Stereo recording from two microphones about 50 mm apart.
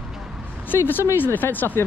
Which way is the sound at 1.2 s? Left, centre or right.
Left.